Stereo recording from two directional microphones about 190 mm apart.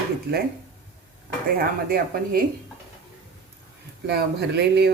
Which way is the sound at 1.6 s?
50° right (ahead or behind).